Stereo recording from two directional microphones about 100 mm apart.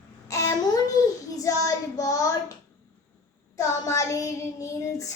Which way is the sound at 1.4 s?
35° left (ahead or behind).